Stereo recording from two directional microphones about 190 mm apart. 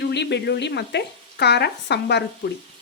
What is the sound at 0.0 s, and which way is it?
A woman's voice, 65° left (ahead or behind).